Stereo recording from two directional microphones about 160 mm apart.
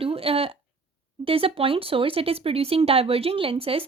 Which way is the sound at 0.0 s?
35° right (ahead or behind).